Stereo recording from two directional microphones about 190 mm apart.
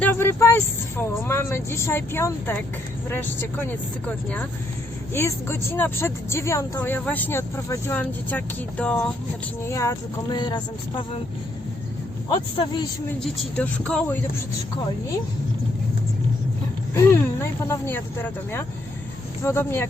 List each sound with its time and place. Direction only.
0.0 s vehicle: 10° left (ahead or behind)
0.9 s speech: 10° left (ahead or behind)
12.3 s speech: 25° left (ahead or behind)
13.2 s speech: 5° left (ahead or behind)
16.9 s speech: 15° left (ahead or behind)